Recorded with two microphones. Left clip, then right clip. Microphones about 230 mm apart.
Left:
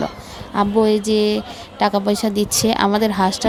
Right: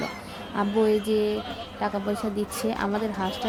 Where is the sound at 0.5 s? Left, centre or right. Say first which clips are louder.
Left 7 dB; left.